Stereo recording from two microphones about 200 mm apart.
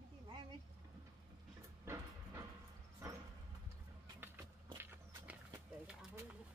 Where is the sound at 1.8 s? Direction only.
15° right (ahead or behind).